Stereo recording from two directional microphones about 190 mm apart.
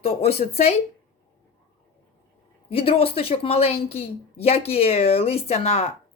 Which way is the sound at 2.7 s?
30° left (ahead or behind).